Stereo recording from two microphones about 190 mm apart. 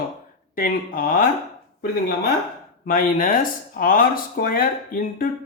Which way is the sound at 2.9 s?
50° left (ahead or behind).